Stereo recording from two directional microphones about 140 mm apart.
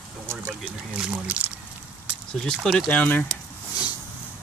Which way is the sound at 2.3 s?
5° left (ahead or behind).